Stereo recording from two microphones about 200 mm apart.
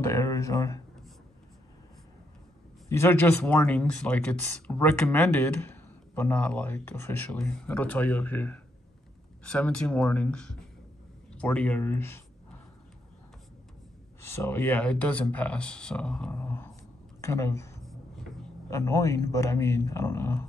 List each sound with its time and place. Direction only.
0.0 s speech: 15° left (ahead or behind)
2.9 s speech: 10° left (ahead or behind)
14.2 s speech: 10° left (ahead or behind)